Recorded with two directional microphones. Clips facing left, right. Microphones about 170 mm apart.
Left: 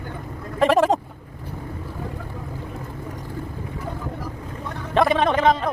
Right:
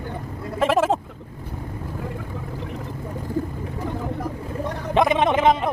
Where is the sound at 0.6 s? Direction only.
Centre (ahead or behind).